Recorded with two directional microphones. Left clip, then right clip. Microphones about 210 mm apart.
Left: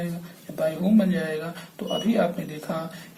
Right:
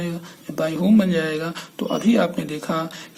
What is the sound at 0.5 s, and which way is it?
A man's voice, 40° right (ahead or behind).